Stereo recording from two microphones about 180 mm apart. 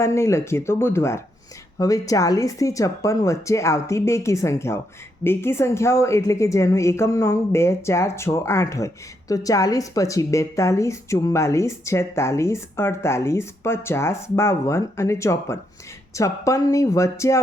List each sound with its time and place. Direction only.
0.0 s a woman's voice: 15° left (ahead or behind)